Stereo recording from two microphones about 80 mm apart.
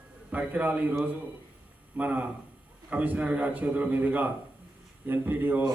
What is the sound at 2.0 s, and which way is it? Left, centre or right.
A man's voice, centre.